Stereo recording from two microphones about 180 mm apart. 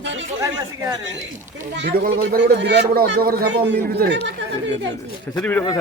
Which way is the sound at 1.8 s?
55° right (ahead or behind).